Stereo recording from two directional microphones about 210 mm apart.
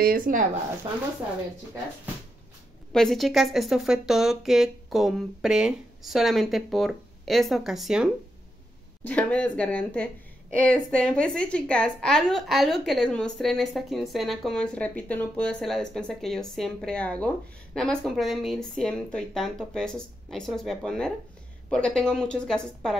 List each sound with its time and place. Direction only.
0.0 s speech: 40° right (ahead or behind)
2.9 s a woman's voice: centre (ahead or behind)